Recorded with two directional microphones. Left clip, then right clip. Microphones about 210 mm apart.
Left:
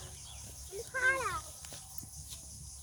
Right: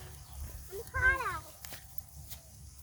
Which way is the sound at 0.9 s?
50° right (ahead or behind).